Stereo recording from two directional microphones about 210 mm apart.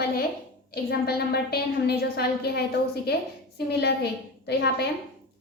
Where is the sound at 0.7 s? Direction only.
50° left (ahead or behind).